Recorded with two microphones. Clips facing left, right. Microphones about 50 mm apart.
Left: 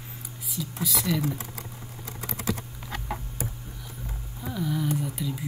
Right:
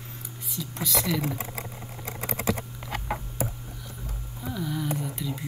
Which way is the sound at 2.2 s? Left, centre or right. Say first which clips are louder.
Right 3 dB; right.